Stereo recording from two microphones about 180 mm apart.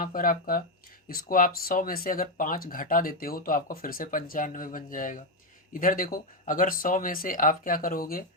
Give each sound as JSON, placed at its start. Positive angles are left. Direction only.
{"t": 0.0, "sound": "speech", "side_deg": 50}